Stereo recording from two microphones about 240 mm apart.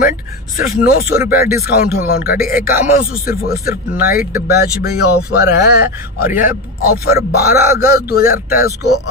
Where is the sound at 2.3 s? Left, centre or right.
Left.